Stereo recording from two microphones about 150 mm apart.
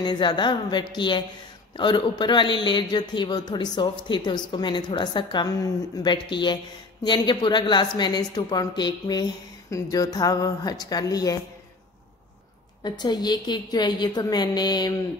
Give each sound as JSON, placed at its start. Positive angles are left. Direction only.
{"t": 0.0, "sound": "a man's voice", "side_deg": 30}
{"t": 12.8, "sound": "a woman's voice", "side_deg": 30}